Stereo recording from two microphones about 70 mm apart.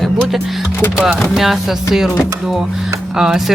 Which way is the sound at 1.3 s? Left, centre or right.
Centre.